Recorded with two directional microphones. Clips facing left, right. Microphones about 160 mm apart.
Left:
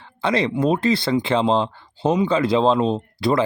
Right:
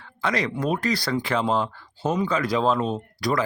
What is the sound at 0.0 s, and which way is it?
Speech, 30° left (ahead or behind).